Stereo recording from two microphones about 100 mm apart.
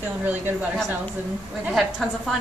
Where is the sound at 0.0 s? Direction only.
15° right (ahead or behind).